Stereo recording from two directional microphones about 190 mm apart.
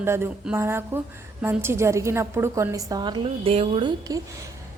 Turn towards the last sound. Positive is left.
turn(degrees=-20)  # may be behind; listen again after turning